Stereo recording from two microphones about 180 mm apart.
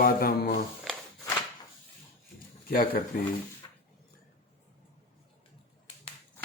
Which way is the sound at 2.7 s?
50° left (ahead or behind).